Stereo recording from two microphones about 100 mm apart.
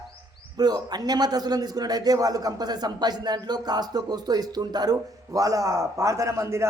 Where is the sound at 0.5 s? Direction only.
40° right (ahead or behind).